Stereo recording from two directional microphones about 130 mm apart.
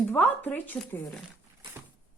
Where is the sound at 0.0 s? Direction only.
15° left (ahead or behind).